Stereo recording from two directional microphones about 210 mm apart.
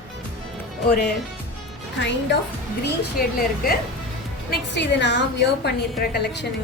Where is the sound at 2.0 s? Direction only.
60° left (ahead or behind).